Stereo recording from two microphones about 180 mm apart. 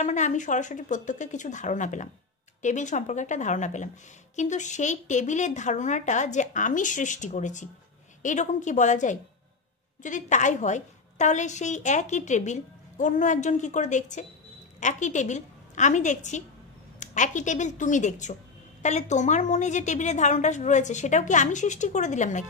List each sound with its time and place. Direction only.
0.0 s a woman's voice: 40° left (ahead or behind)